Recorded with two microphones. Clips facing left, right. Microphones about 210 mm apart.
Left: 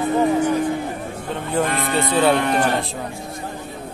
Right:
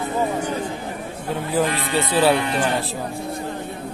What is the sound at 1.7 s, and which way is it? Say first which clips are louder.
Speech: left 1 dB; 55° left (ahead or behind).